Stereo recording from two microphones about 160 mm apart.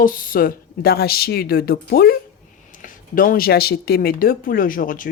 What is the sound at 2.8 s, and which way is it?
Speech, 55° left (ahead or behind).